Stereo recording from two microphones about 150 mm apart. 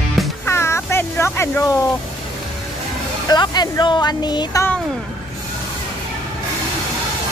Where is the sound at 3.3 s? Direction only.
30° left (ahead or behind).